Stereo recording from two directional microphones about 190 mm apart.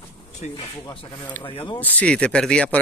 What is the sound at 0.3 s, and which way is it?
Speech, 40° left (ahead or behind).